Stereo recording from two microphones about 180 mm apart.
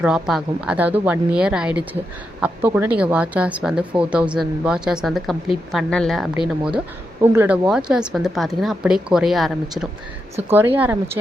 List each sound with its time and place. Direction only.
0.0 s speech: centre (ahead or behind)
10.5 s speech: 10° right (ahead or behind)